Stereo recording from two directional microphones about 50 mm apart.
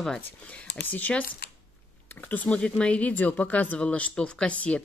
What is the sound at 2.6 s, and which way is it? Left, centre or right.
Speech, left.